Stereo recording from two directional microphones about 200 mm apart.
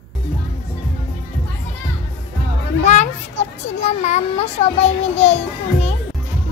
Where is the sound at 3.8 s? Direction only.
35° left (ahead or behind).